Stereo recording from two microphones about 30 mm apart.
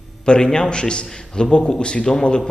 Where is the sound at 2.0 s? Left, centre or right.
Centre.